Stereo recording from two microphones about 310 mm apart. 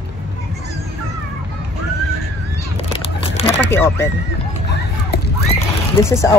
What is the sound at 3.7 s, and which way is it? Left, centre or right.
Speech, centre.